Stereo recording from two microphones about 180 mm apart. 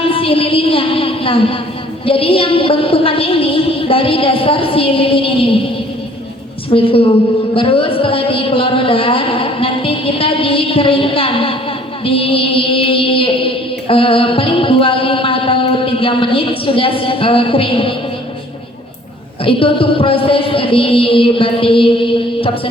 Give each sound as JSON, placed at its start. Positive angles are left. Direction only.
{"t": 0.0, "sound": "a woman's voice", "side_deg": 30}
{"t": 6.7, "sound": "a woman's voice", "side_deg": 30}
{"t": 12.0, "sound": "music", "side_deg": 30}
{"t": 19.5, "sound": "a woman's voice", "side_deg": 30}